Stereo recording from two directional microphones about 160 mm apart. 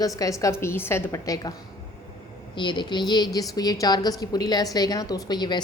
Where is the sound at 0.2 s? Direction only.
20° left (ahead or behind).